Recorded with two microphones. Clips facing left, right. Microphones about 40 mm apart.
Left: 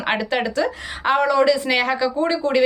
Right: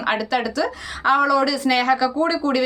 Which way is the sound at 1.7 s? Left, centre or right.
Centre.